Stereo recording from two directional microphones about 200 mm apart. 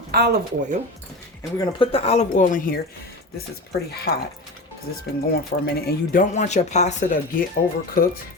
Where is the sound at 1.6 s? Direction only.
25° left (ahead or behind).